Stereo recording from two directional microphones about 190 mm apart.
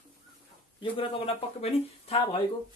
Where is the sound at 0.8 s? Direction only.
30° left (ahead or behind).